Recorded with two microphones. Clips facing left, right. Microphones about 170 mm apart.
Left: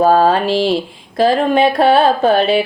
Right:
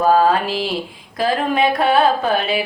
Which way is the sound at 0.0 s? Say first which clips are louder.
Left 3 dB; 30° left (ahead or behind).